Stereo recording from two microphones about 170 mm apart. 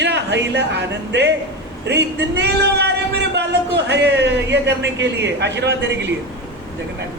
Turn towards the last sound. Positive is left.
turn(degrees=-90)